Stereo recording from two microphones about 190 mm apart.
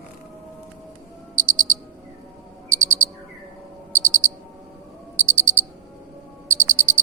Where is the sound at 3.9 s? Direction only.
90° right.